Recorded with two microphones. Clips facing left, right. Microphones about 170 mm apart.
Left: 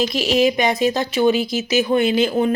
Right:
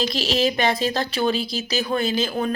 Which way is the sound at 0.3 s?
15° left (ahead or behind).